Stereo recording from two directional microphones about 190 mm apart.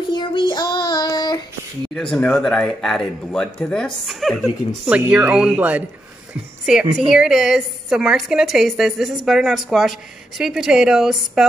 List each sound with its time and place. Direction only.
0.1 s child singing: 25° left (ahead or behind)
2.1 s a woman's voice: 5° left (ahead or behind)